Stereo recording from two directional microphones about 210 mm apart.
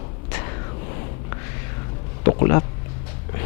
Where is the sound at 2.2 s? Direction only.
20° left (ahead or behind).